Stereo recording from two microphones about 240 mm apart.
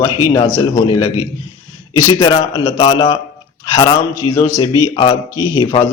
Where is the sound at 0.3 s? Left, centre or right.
Centre.